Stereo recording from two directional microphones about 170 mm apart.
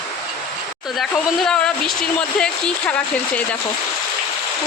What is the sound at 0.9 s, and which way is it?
Speech, centre (ahead or behind).